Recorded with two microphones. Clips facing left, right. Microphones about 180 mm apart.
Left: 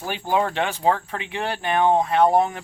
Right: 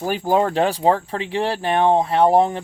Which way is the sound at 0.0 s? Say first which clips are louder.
Right 4 dB; 40° right (ahead or behind).